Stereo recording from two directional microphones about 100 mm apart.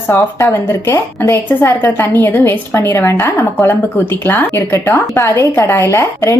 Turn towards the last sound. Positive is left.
turn(degrees=30)  # may be behind; listen again after turning